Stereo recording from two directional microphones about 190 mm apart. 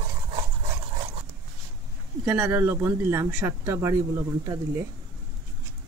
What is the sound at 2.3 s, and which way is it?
Speech, 5° right (ahead or behind).